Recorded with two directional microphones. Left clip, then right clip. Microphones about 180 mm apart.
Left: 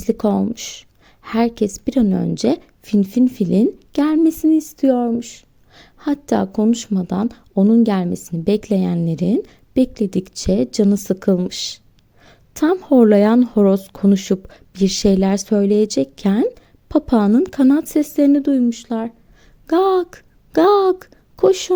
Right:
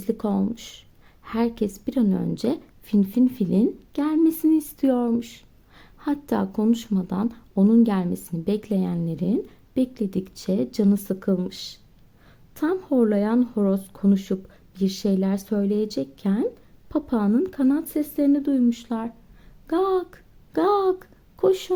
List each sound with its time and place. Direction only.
0.0 s a woman's voice: 30° left (ahead or behind)
18.6 s a woman's voice: 25° left (ahead or behind)